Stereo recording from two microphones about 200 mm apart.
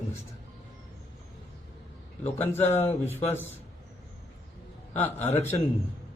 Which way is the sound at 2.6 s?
30° left (ahead or behind).